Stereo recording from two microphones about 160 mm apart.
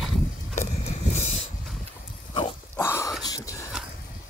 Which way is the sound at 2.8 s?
15° left (ahead or behind).